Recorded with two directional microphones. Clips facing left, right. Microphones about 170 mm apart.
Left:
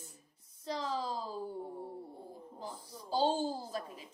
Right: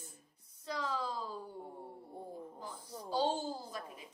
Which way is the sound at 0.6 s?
30° left (ahead or behind).